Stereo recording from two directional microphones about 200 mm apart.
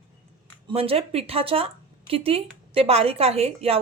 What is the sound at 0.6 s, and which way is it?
A woman's voice, 30° right (ahead or behind).